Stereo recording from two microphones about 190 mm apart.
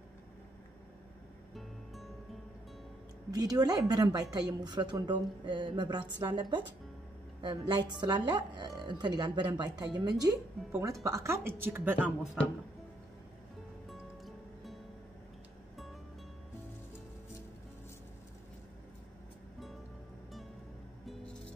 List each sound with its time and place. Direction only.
3.3 s a woman's voice: 20° right (ahead or behind)
10.6 s speech: centre (ahead or behind)
11.1 s speech: 15° right (ahead or behind)
13.8 s music: centre (ahead or behind)
21.0 s music: centre (ahead or behind)